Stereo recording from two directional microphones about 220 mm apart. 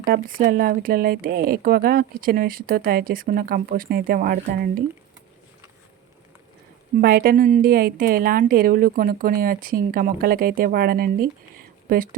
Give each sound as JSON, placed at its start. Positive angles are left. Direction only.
{"t": 0.0, "sound": "speech", "side_deg": -40}
{"t": 7.0, "sound": "speech", "side_deg": -45}